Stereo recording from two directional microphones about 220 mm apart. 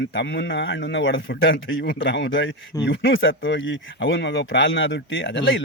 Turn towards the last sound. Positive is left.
turn(degrees=55)  # may be behind; listen again after turning